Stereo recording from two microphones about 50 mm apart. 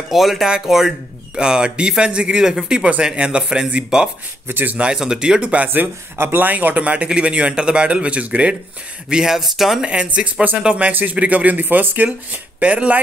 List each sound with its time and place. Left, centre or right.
0.1 s a man's voice: centre
4.5 s speech: right
4.9 s a man's voice: centre
5.4 s a man's voice: right
5.7 s speech: right
6.4 s a man's voice: right
9.1 s a man's voice: centre
9.8 s a man's voice: right